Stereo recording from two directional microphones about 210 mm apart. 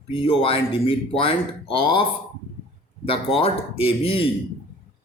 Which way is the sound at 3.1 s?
25° left (ahead or behind).